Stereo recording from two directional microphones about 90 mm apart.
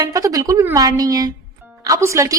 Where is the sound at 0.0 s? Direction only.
40° right (ahead or behind).